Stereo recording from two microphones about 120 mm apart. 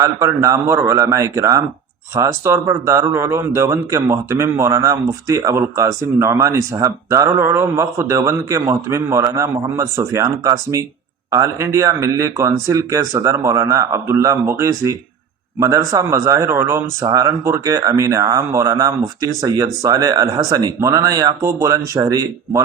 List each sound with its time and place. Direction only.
0.0 s speech: 25° right (ahead or behind)